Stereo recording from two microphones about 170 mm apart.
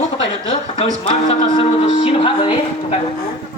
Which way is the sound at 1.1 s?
40° left (ahead or behind).